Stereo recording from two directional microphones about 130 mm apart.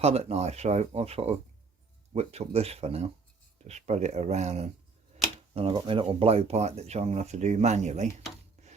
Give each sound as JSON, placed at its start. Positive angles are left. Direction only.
{"t": 0.0, "sound": "speech", "side_deg": -55}
{"t": 5.5, "sound": "speech", "side_deg": -45}
{"t": 8.6, "sound": "rub", "side_deg": -60}